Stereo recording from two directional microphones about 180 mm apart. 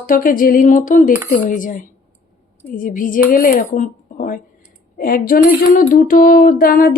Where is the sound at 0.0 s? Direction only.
50° left (ahead or behind).